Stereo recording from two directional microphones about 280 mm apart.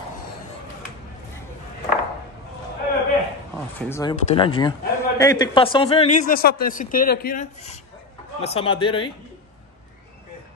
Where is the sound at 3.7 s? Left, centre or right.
Centre.